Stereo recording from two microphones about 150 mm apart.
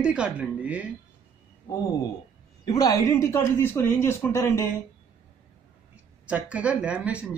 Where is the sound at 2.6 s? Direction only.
25° left (ahead or behind).